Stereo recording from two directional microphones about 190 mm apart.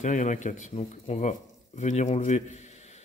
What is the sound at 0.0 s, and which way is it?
Speech, 40° left (ahead or behind).